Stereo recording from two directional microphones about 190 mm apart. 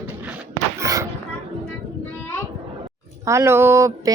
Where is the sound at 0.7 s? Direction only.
15° right (ahead or behind).